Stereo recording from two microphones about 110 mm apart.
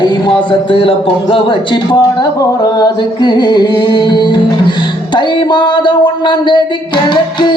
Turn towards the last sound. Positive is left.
turn(degrees=45)  # may be behind; listen again after turning